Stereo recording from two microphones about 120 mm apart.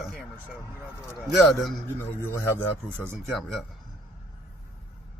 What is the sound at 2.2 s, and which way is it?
Speech, 15° left (ahead or behind).